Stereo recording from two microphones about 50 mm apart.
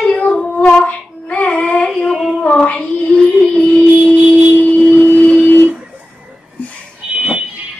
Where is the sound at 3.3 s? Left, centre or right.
Centre.